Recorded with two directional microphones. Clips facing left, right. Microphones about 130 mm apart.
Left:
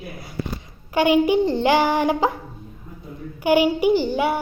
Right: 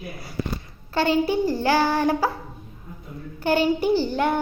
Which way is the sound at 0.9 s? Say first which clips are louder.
Left 4 dB; 15° left (ahead or behind).